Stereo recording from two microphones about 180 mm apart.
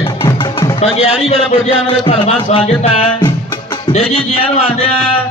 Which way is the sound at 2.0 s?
35° left (ahead or behind).